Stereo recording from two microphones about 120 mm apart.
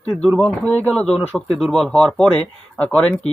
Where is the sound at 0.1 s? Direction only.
5° left (ahead or behind).